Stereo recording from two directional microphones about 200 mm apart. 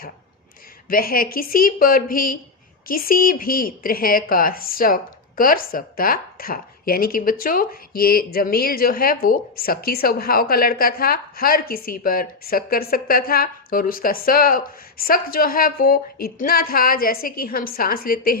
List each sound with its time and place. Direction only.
0.9 s a woman's voice: 45° left (ahead or behind)